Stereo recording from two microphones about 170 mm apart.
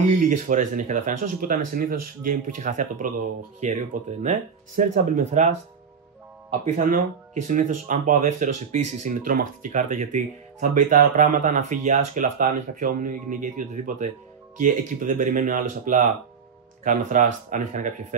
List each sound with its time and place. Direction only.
0.3 s speech: 50° right (ahead or behind)
6.6 s speech: 45° right (ahead or behind)